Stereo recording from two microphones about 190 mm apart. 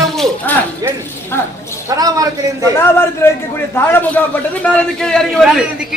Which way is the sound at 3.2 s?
15° left (ahead or behind).